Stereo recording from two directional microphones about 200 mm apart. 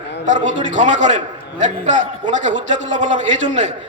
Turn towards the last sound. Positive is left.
turn(degrees=-35)  # may be behind; listen again after turning